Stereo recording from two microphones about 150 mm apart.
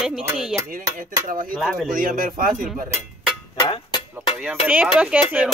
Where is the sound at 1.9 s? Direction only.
70° right (ahead or behind).